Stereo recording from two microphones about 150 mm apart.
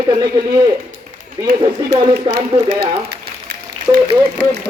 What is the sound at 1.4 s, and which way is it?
Speech, 30° right (ahead or behind).